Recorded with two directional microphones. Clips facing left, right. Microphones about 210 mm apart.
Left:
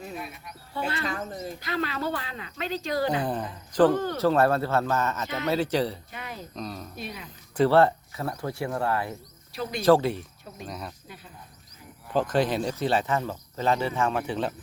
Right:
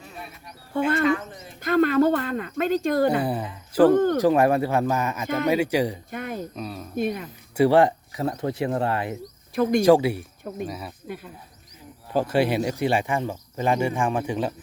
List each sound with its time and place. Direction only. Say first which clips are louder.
1.0 s bird: right 8 dB; 40° left (ahead or behind)
1.6 s speech: right 12 dB; 50° right (ahead or behind)
3.2 s speech: right 3 dB; 5° right (ahead or behind)
3.9 s speech: right 9 dB; 50° right (ahead or behind)
4.2 s speech: right 3 dB; 15° right (ahead or behind)
6.1 s speech: right 8 dB; 50° right (ahead or behind)
6.6 s speech: right 2 dB; 5° right (ahead or behind)
6.9 s speech: right 12 dB; 50° right (ahead or behind)
7.5 s speech: right 2 dB; 15° right (ahead or behind)
12.1 s speech: right 3 dB; 10° right (ahead or behind)